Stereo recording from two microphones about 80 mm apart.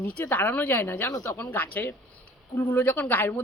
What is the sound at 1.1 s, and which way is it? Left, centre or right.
Speech, left.